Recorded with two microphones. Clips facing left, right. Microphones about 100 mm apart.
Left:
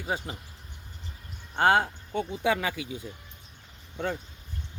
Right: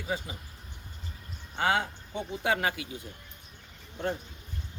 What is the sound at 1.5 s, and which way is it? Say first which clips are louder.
Speech: left 5 dB; 50° left (ahead or behind).